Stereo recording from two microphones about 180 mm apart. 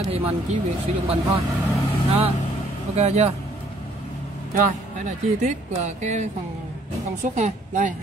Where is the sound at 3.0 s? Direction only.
35° right (ahead or behind).